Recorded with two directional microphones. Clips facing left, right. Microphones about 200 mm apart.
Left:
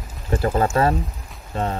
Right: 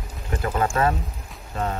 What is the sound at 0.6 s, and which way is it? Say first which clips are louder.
Speech: left 3 dB; 25° left (ahead or behind).